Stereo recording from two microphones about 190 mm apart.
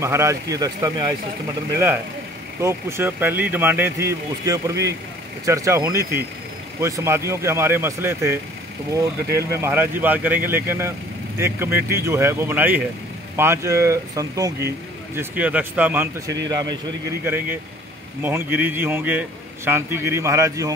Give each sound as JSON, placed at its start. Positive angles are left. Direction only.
{"t": 0.0, "sound": "a man's voice", "side_deg": -15}
{"t": 2.6, "sound": "a man's voice", "side_deg": -10}
{"t": 9.5, "sound": "a man's voice", "side_deg": -10}
{"t": 16.4, "sound": "speech", "side_deg": -20}
{"t": 17.2, "sound": "a man's voice", "side_deg": -10}